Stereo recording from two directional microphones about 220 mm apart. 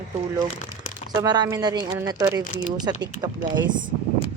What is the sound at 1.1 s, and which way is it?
Speech, 15° right (ahead or behind).